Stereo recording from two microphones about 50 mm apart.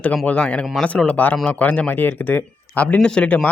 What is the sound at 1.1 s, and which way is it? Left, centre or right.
Speech, left.